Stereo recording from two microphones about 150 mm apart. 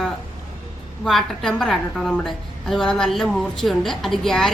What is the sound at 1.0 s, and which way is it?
A woman's voice, centre (ahead or behind).